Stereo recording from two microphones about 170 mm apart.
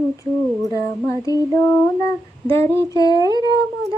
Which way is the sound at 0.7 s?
20° left (ahead or behind).